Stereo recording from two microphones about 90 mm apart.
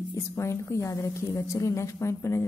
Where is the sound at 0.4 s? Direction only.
30° left (ahead or behind).